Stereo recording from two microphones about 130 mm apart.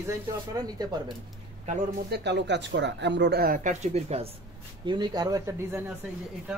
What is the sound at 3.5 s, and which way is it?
Speech, 65° right (ahead or behind).